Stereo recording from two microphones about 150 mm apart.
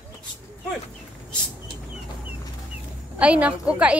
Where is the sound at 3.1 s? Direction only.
10° right (ahead or behind).